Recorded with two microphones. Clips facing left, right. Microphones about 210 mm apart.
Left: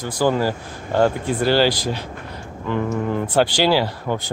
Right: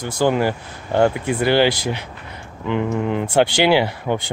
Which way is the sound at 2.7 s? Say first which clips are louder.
Right 1 dB; 20° right (ahead or behind).